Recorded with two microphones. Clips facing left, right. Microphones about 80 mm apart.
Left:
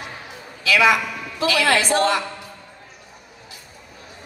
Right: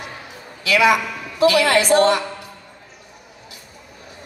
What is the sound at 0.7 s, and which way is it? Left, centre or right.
Speech, centre.